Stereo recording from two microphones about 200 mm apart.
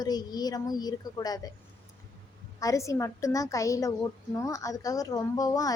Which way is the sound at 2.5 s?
15° left (ahead or behind).